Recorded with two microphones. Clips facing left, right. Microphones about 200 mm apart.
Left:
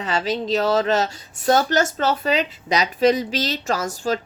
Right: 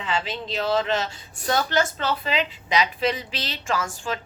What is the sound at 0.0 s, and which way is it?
A woman's voice, 40° left (ahead or behind).